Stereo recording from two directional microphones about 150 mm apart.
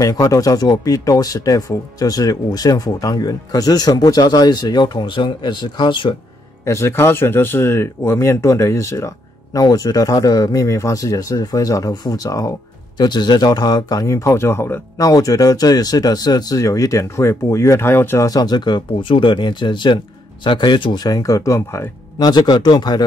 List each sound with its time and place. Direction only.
0.0 s speech: 20° left (ahead or behind)
6.6 s speech: 20° left (ahead or behind)